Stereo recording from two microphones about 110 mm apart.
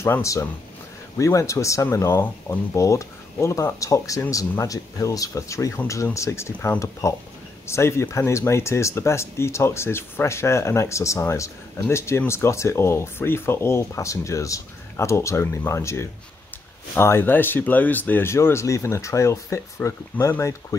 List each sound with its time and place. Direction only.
0.0 s speech: 25° left (ahead or behind)